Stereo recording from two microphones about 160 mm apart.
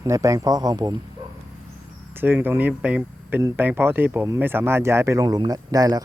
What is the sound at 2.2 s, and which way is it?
A man's voice, 10° right (ahead or behind).